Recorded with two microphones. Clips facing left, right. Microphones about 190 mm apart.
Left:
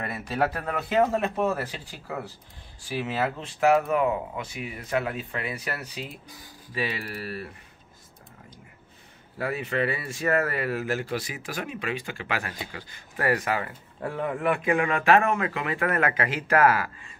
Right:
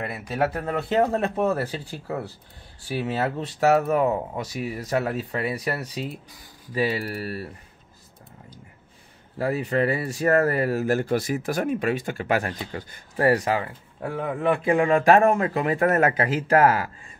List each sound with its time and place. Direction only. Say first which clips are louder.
0.0 s a sound: right 2 dB; 15° right (ahead or behind)
0.8 s speech: right 1 dB; 35° right (ahead or behind)
9.4 s speech: right 4 dB; 35° right (ahead or behind)
13.1 s speech: right 5 dB; 30° right (ahead or behind)